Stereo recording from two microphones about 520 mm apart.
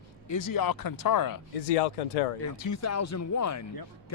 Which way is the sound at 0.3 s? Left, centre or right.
Left.